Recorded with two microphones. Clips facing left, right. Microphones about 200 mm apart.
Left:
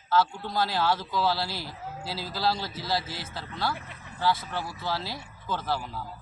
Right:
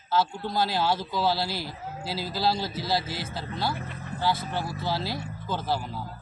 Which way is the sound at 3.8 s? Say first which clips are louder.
Right 8 dB; 45° right (ahead or behind).